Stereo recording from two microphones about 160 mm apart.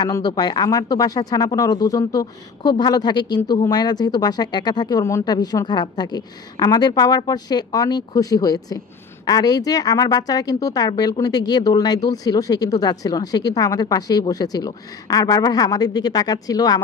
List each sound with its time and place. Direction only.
0.0 s speech: 25° left (ahead or behind)